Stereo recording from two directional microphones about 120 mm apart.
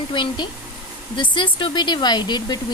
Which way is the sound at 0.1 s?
40° left (ahead or behind).